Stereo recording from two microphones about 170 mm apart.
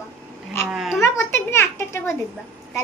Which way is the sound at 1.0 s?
15° left (ahead or behind).